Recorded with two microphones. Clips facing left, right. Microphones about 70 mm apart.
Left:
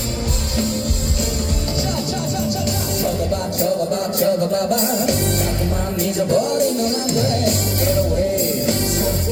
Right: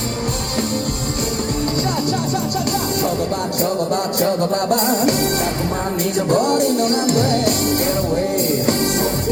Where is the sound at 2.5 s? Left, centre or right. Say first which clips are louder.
Right 2 dB; right.